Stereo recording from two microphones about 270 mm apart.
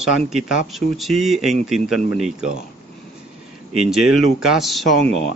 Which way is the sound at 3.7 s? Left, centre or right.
Centre.